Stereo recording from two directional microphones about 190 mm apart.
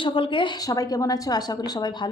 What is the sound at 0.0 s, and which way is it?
Speech, 25° left (ahead or behind).